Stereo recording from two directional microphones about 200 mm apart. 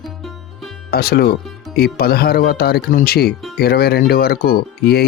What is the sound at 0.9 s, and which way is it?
Speech, 50° left (ahead or behind).